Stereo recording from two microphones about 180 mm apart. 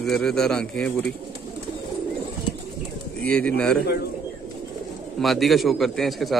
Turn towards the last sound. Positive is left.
turn(degrees=0)  # may be behind; listen again after turning